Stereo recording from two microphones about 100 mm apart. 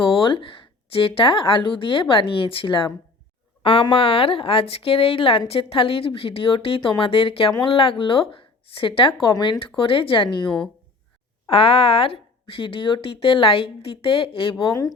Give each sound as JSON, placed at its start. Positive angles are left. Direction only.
{"t": 0.0, "sound": "a sound", "side_deg": 55}
{"t": 1.0, "sound": "speech", "side_deg": 65}
{"t": 11.5, "sound": "speech", "side_deg": 70}